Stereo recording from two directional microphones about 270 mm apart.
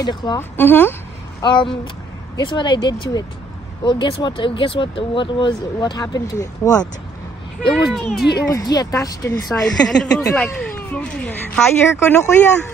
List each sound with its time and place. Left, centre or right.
0.0 s speech: centre
7.7 s speech: centre
8.4 s speech: centre
9.5 s speech: centre